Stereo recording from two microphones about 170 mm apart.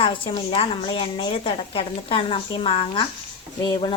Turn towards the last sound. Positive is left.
turn(degrees=25)  # may be behind; listen again after turning